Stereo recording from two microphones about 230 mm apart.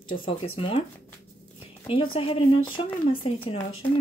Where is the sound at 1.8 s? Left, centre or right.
Left.